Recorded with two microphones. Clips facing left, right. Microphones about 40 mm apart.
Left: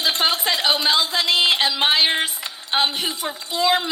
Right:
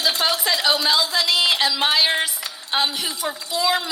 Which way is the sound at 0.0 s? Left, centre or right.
Left.